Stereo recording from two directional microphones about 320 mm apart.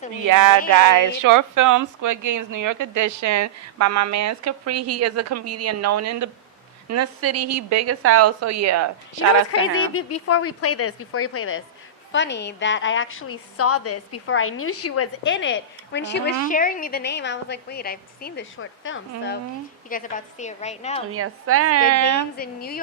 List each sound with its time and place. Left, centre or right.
0.3 s a woman's voice: right
9.5 s a woman's voice: left
19.9 s a woman's voice: left
21.1 s a woman's voice: right
22.4 s a woman's voice: left